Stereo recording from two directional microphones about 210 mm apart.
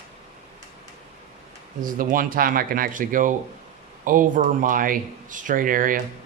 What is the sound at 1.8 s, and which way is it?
Speech, 40° right (ahead or behind).